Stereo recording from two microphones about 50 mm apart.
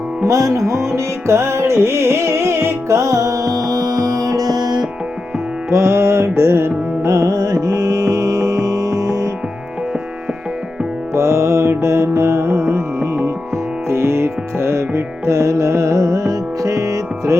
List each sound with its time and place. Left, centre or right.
0.3 s music: right
0.7 s music: right
5.7 s music: right
7.7 s music: right
11.1 s music: right